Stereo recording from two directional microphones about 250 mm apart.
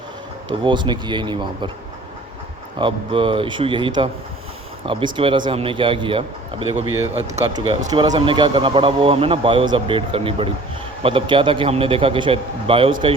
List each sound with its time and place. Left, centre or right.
0.6 s speech: centre
2.7 s speech: centre